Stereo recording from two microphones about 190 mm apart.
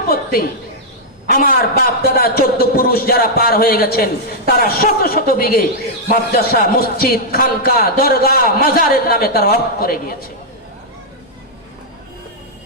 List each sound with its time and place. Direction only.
1.3 s a man's voice: 50° left (ahead or behind)